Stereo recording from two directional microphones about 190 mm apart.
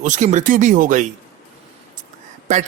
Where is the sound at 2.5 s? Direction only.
45° right (ahead or behind).